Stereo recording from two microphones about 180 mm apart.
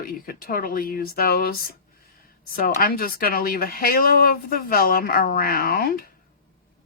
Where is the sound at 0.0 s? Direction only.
55° left (ahead or behind).